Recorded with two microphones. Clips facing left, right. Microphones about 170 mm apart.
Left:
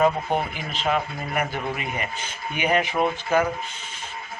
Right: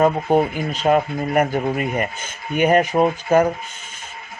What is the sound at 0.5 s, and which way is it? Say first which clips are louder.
Speech: right 8 dB; 45° right (ahead or behind).